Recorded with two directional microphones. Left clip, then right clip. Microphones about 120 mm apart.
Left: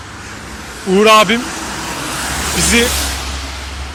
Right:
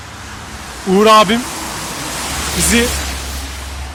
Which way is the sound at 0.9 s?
45° right (ahead or behind).